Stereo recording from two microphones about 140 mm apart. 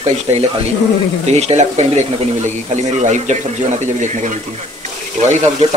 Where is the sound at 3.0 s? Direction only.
60° right (ahead or behind).